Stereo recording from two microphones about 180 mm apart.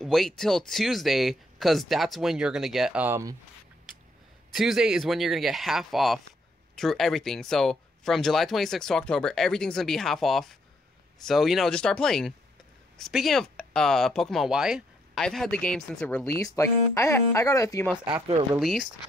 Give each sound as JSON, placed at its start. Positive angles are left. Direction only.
{"t": 0.0, "sound": "speech", "side_deg": 0}
{"t": 4.6, "sound": "speech", "side_deg": -5}
{"t": 16.3, "sound": "speech", "side_deg": 20}
{"t": 18.0, "sound": "speech", "side_deg": -30}
{"t": 18.5, "sound": "speech", "side_deg": 0}